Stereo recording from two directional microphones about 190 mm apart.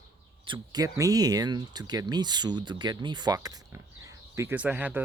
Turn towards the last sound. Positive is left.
turn(degrees=-10)  # may be behind; listen again after turning